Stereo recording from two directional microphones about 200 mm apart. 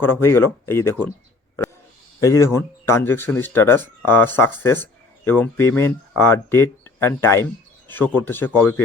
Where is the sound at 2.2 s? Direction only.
15° left (ahead or behind).